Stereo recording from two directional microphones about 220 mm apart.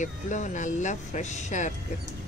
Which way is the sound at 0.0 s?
35° left (ahead or behind).